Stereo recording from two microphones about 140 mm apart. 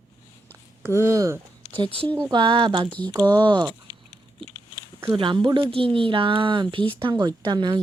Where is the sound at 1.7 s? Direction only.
40° right (ahead or behind).